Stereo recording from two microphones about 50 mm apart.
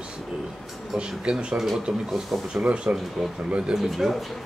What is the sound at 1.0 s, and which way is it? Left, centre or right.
Speech, centre.